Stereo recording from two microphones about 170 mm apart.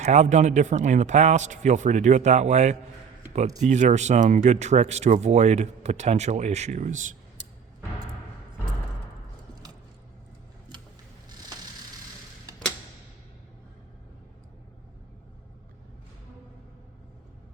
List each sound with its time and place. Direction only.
0.0 s speech: 45° right (ahead or behind)